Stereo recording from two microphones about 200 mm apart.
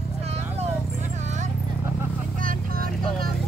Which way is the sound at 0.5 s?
35° right (ahead or behind).